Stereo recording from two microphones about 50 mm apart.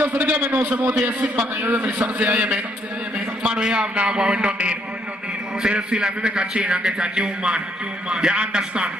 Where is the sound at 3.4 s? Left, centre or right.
Centre.